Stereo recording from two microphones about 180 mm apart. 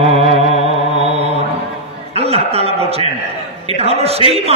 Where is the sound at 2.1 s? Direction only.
35° right (ahead or behind).